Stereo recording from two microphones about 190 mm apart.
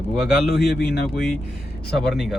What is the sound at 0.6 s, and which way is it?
Speech, 60° left (ahead or behind).